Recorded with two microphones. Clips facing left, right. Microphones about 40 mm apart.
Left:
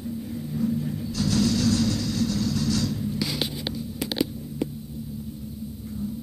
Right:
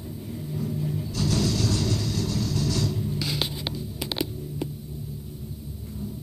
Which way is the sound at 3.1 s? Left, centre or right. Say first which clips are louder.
Left 1 dB; centre.